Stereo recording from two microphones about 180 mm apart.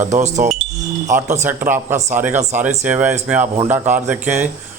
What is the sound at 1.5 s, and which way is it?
Speech, 10° right (ahead or behind).